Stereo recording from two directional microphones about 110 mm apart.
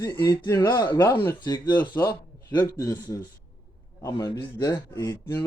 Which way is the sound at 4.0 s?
35° left (ahead or behind).